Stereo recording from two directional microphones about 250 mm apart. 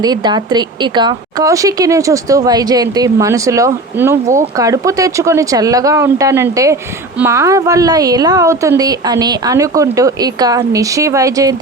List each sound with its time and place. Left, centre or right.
0.0 s a woman's voice: centre